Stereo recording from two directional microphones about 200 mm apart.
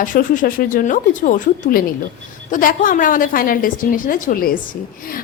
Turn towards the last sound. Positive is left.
turn(degrees=45)  # may be behind; listen again after turning